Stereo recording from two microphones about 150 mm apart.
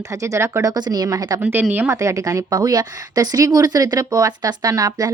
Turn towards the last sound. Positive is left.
turn(degrees=-25)  # may be behind; listen again after turning